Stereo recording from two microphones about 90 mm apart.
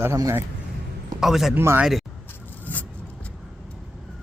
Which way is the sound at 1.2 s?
5° right (ahead or behind).